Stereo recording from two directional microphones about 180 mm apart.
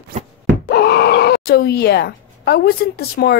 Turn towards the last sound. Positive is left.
turn(degrees=60)  # may be behind; listen again after turning